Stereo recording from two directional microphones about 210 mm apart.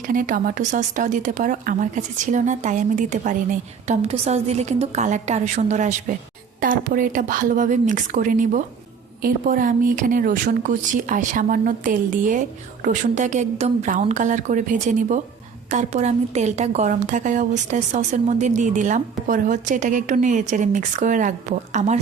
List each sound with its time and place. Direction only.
0.1 s a woman's voice: 40° right (ahead or behind)